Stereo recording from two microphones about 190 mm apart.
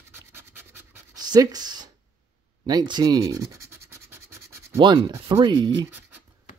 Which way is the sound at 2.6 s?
20° right (ahead or behind).